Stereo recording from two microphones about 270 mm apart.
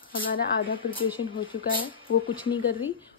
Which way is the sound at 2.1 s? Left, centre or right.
Left.